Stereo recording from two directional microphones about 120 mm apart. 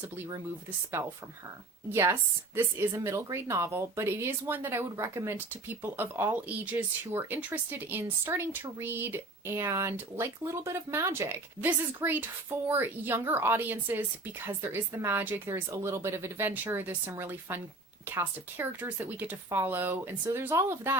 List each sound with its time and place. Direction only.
1.0 s speech: 20° right (ahead or behind)